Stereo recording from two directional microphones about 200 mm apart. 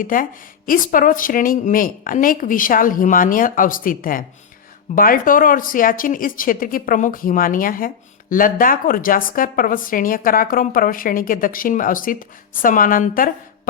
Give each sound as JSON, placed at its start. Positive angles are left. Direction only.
{"t": 0.0, "sound": "speech", "side_deg": 45}